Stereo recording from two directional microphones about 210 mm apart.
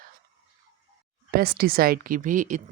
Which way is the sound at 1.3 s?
45° right (ahead or behind).